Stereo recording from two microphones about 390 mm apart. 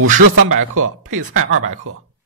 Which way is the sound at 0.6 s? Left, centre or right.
Right.